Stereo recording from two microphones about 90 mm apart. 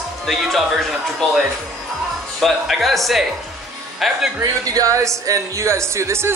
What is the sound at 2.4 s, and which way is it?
Speech, centre (ahead or behind).